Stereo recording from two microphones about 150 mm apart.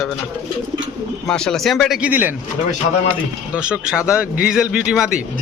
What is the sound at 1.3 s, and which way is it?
Speech, 5° left (ahead or behind).